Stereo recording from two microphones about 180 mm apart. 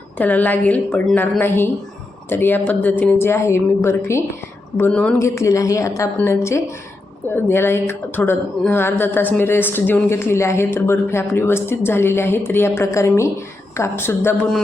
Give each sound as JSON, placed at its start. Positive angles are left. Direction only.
{"t": 0.2, "sound": "a woman's voice", "side_deg": 10}